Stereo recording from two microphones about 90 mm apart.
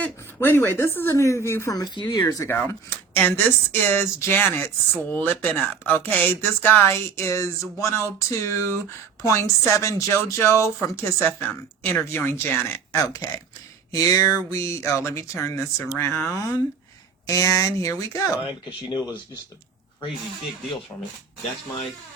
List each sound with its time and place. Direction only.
0.0 s speech: 25° left (ahead or behind)
2.5 s speech: 25° left (ahead or behind)
17.2 s speech: 40° left (ahead or behind)
20.9 s speech: 35° left (ahead or behind)